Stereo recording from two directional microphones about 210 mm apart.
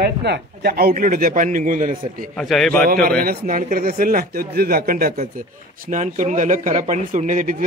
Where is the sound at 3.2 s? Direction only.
40° right (ahead or behind).